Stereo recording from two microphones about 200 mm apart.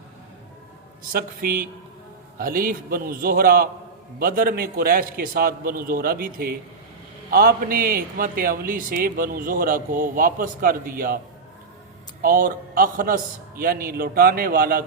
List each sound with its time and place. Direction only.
1.1 s a man's voice: 45° right (ahead or behind)
12.2 s a man's voice: 45° right (ahead or behind)